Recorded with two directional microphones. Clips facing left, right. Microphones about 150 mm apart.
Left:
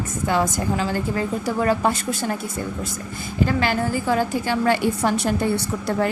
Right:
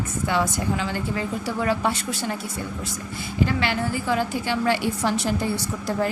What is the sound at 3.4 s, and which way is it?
A woman's voice, 45° left (ahead or behind).